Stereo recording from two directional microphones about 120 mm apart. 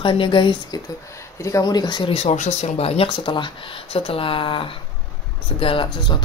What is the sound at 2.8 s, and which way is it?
Speech, 55° left (ahead or behind).